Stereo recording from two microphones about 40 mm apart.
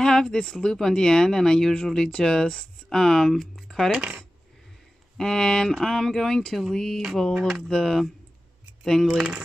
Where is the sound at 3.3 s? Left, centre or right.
Centre.